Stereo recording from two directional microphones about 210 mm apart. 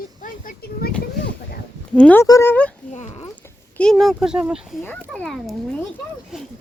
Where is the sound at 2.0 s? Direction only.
5° left (ahead or behind).